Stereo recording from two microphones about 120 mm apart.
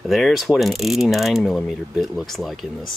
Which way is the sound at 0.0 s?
Centre (ahead or behind).